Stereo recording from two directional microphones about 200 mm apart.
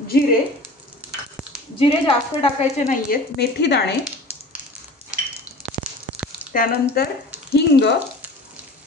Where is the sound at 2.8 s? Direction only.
50° left (ahead or behind).